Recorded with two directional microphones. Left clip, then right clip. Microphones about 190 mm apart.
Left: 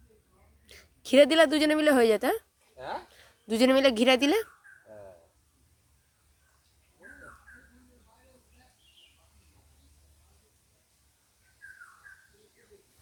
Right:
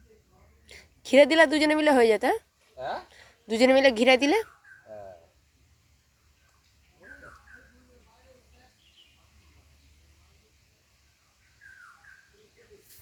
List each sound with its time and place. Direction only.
0.7 s a woman's voice: 15° left (ahead or behind)